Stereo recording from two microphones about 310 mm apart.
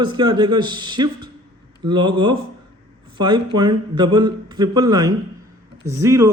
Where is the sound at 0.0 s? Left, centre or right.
Centre.